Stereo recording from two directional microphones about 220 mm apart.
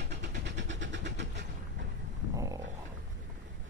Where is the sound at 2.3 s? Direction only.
15° right (ahead or behind).